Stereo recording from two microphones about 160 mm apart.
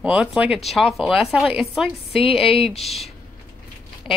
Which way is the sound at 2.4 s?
35° left (ahead or behind).